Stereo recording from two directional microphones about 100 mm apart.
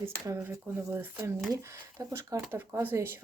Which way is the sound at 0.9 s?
20° right (ahead or behind).